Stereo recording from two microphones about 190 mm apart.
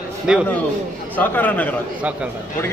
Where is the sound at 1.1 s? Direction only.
10° left (ahead or behind).